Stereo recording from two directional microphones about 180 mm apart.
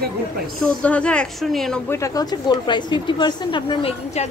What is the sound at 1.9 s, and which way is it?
Speech, 15° left (ahead or behind).